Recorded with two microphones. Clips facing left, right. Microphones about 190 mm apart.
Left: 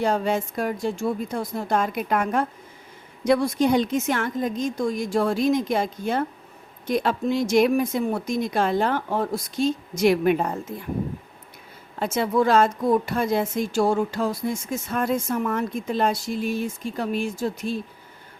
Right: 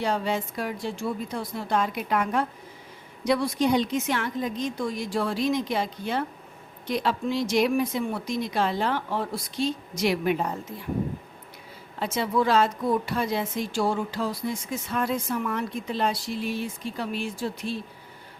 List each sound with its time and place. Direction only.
0.0 s speech: 45° left (ahead or behind)
11.9 s speech: 50° left (ahead or behind)